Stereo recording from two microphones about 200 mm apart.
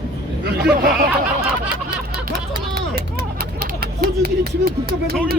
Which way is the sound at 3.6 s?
50° right (ahead or behind).